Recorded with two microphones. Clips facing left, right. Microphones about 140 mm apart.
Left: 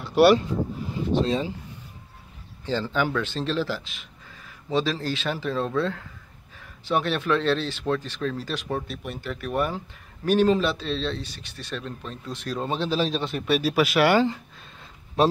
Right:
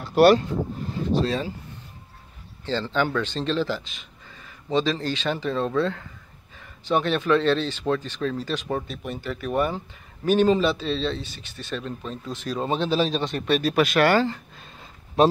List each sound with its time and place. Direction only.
0.0 s speech: 40° right (ahead or behind)
1.1 s speech: 20° left (ahead or behind)
2.6 s speech: 10° left (ahead or behind)
15.2 s speech: centre (ahead or behind)